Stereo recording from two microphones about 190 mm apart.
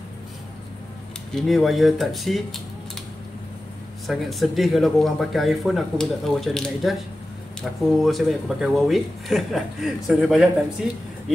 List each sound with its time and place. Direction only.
1.3 s speech: centre (ahead or behind)
4.1 s speech: centre (ahead or behind)
8.0 s speech: centre (ahead or behind)